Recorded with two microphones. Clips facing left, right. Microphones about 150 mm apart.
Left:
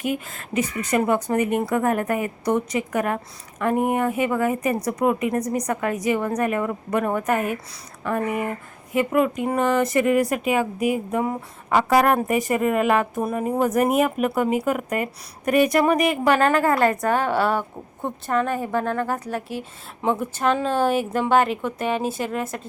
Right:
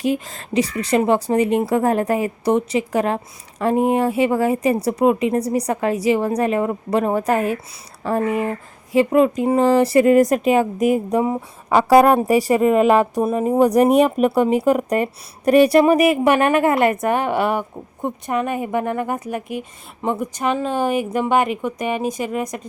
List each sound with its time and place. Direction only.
0.0 s a woman's voice: 35° right (ahead or behind)
11.2 s a woman's voice: 25° right (ahead or behind); by 22.6 s 5° right (ahead or behind)